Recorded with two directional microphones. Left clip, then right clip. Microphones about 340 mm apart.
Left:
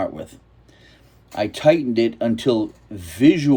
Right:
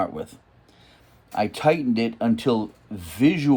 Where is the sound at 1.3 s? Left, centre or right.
Centre.